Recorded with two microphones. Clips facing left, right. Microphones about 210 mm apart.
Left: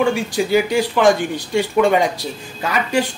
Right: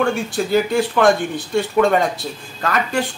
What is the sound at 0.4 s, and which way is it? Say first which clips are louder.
A woman's voice: even; 5° left (ahead or behind).